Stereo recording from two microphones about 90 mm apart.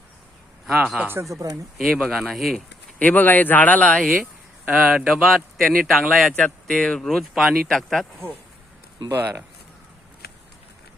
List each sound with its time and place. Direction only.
0.9 s speech: 25° right (ahead or behind)
1.2 s speech: 35° right (ahead or behind)
1.8 s speech: centre (ahead or behind)
3.0 s speech: 15° left (ahead or behind)
4.6 s speech: 15° right (ahead or behind)
5.2 s speech: centre (ahead or behind)
6.4 s speech: 10° left (ahead or behind)